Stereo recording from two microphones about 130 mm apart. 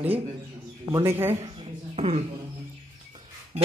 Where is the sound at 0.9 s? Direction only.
20° right (ahead or behind).